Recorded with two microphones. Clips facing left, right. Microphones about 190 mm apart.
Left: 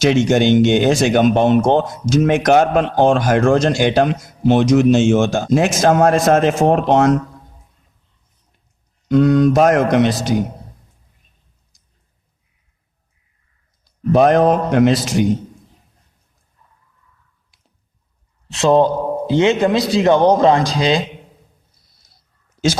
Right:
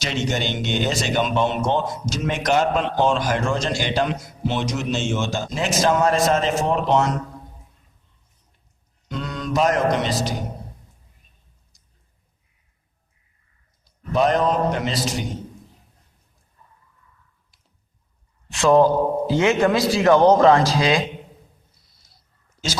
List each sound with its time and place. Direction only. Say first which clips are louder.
0.0 s speech: left 11 dB; 50° left (ahead or behind)
9.0 s speech: left 16 dB; 55° left (ahead or behind)
14.1 s mantra: left 7 dB; 55° left (ahead or behind)
18.5 s speech: left 2 dB; 25° left (ahead or behind)